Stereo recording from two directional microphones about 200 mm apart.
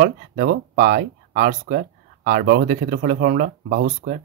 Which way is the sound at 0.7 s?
45° right (ahead or behind).